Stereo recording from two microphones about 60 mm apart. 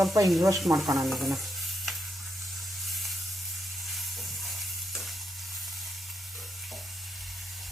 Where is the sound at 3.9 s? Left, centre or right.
Centre.